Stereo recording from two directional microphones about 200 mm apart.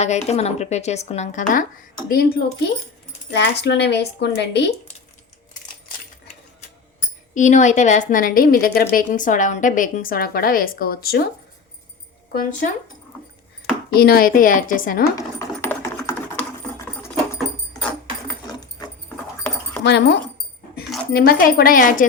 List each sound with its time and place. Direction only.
0.0 s a woman's voice: 35° left (ahead or behind); by 4.7 s 55° left (ahead or behind)
7.3 s a woman's voice: 40° left (ahead or behind)
12.3 s a woman's voice: 45° left (ahead or behind)
13.9 s a woman's voice: 50° left (ahead or behind)
15.1 s typing: 15° left (ahead or behind)
19.4 s dog: 5° left (ahead or behind)
19.8 s a woman's voice: 60° left (ahead or behind); by 22.0 s 45° left (ahead or behind)